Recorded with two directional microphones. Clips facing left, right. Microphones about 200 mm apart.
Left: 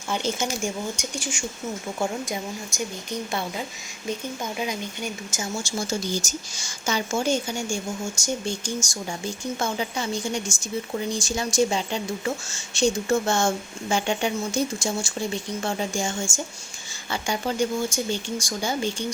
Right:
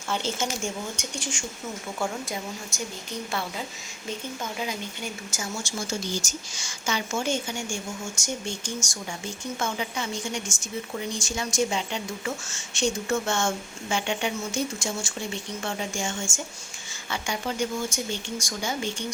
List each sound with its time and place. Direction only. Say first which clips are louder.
0.1 s a woman's voice: left 2 dB; 15° left (ahead or behind)
2.0 s a woman's voice: left 2 dB; 20° left (ahead or behind)
5.3 s a woman's voice: left 3 dB; 20° left (ahead or behind)
6.6 s speech: left 3 dB; 35° left (ahead or behind)